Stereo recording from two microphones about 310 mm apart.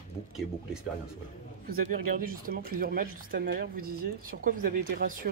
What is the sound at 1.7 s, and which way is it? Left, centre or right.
Speech, right.